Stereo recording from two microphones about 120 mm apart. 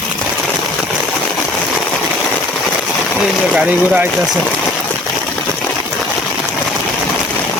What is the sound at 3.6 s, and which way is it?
Speech, 10° right (ahead or behind).